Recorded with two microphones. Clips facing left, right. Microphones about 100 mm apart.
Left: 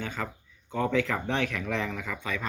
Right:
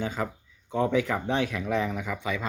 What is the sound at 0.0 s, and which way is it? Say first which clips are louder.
Speech: right 4 dB; 20° right (ahead or behind).